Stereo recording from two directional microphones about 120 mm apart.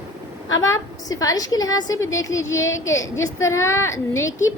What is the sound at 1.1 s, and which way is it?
A woman's voice, 30° left (ahead or behind).